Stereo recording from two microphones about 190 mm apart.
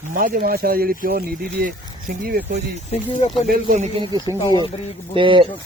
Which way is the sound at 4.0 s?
20° right (ahead or behind).